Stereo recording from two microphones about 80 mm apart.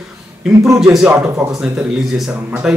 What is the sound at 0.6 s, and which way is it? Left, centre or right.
Speech, right.